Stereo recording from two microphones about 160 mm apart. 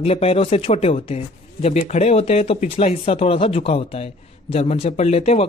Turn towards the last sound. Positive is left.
turn(degrees=40)  # may be behind; listen again after turning